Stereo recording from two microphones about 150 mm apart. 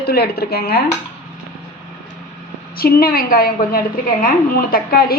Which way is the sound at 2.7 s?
90° left.